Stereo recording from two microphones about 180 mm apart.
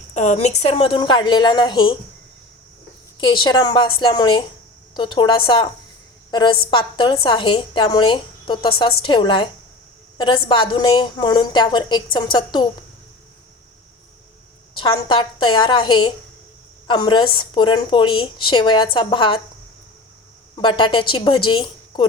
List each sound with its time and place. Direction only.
0.1 s a woman's voice: 40° left (ahead or behind)
3.2 s a woman's voice: 25° left (ahead or behind)
14.8 s a woman's voice: 30° left (ahead or behind)
20.6 s a woman's voice: 25° left (ahead or behind)